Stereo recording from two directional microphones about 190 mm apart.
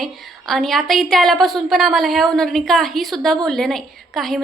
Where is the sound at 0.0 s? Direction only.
Centre (ahead or behind).